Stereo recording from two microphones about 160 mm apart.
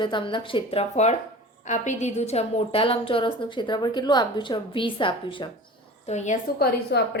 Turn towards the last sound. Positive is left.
turn(degrees=90)